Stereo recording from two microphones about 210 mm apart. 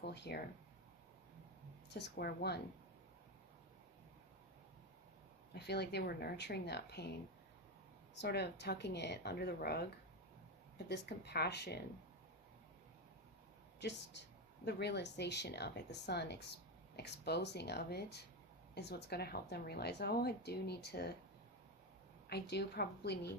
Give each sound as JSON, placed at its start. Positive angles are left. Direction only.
{"t": 0.0, "sound": "speech", "side_deg": 50}
{"t": 1.9, "sound": "speech", "side_deg": 55}
{"t": 5.5, "sound": "speech", "side_deg": 50}
{"t": 8.1, "sound": "speech", "side_deg": 50}
{"t": 10.8, "sound": "speech", "side_deg": 50}
{"t": 13.7, "sound": "speech", "side_deg": 55}
{"t": 22.3, "sound": "speech", "side_deg": 50}